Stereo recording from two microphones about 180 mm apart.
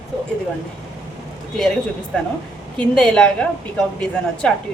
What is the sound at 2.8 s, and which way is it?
A woman's voice, 5° left (ahead or behind).